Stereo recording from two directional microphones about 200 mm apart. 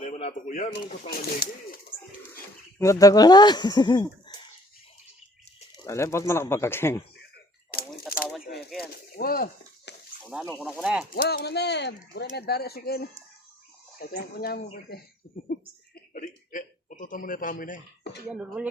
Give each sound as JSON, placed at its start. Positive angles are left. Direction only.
{"t": 0.0, "sound": "speech", "side_deg": 35}
{"t": 2.7, "sound": "speech", "side_deg": 15}
{"t": 5.8, "sound": "speech", "side_deg": 15}
{"t": 8.1, "sound": "a sound", "side_deg": 0}
{"t": 8.8, "sound": "a sound", "side_deg": 50}
{"t": 10.2, "sound": "speech", "side_deg": -5}
{"t": 11.1, "sound": "speech", "side_deg": 50}
{"t": 16.1, "sound": "a sound", "side_deg": 40}
{"t": 18.3, "sound": "speech", "side_deg": -5}